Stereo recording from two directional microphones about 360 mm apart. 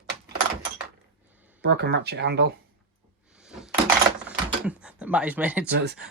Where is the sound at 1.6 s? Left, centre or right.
Right.